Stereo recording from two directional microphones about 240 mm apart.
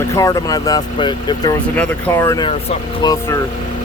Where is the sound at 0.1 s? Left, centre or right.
Centre.